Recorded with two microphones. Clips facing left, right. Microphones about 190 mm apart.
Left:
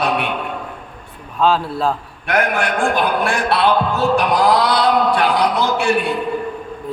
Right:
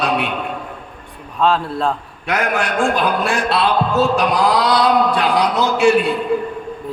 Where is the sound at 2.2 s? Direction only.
60° left (ahead or behind).